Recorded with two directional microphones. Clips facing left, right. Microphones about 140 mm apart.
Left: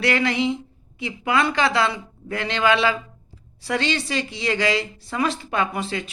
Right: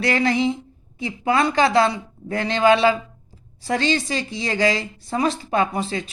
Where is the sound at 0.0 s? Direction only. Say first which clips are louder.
Right 2 dB; 35° right (ahead or behind).